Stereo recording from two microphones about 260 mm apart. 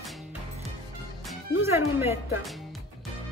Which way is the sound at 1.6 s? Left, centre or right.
Centre.